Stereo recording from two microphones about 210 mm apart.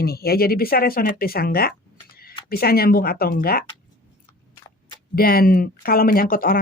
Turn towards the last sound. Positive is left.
turn(degrees=40)  # may be behind; listen again after turning